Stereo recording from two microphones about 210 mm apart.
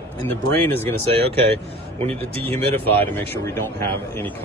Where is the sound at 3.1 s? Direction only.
10° left (ahead or behind).